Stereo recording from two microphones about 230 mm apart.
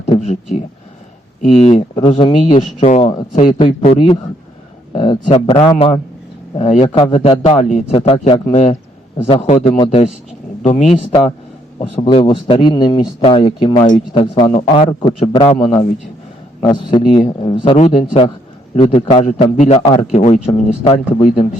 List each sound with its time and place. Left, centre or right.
0.0 s a sound: left
1.4 s a man's voice: left
16.6 s a man's voice: centre